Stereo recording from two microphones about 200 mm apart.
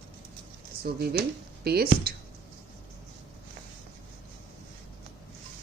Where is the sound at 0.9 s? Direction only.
50° right (ahead or behind).